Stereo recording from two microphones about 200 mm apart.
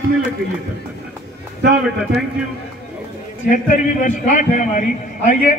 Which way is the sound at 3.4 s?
40° left (ahead or behind).